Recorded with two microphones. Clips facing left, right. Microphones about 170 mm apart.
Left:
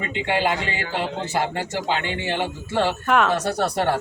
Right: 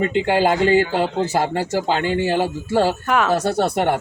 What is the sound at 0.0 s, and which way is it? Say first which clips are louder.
Speech: right 6 dB; 40° right (ahead or behind).